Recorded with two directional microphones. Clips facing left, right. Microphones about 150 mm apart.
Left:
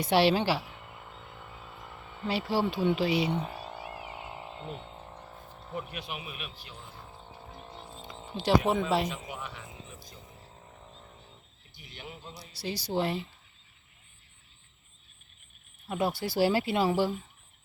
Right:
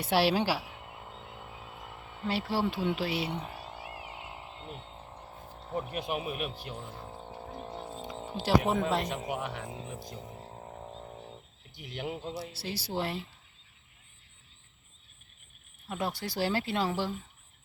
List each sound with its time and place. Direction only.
0.0 s a sound: 5° right (ahead or behind)
2.2 s speech: centre (ahead or behind)
4.3 s a sound: centre (ahead or behind)
5.5 s a sound: 35° right (ahead or behind)
6.0 s speech: 45° right (ahead or behind)
7.1 s a sound: 35° right (ahead or behind)
8.4 s speech: centre (ahead or behind)
9.2 s speech: 65° right (ahead or behind)
10.3 s wild animals: 50° right (ahead or behind)
11.8 s speech: 85° right
12.5 s speech: 5° right (ahead or behind)
15.9 s speech: 5° left (ahead or behind)